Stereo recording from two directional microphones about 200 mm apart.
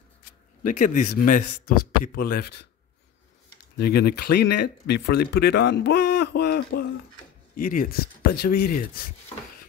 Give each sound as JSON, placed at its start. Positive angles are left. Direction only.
{"t": 0.7, "sound": "a man's voice", "side_deg": 40}
{"t": 3.7, "sound": "speech", "side_deg": 50}